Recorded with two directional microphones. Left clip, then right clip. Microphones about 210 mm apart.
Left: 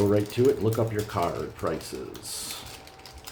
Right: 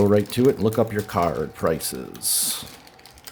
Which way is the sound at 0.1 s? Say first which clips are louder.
Right 4 dB; 50° right (ahead or behind).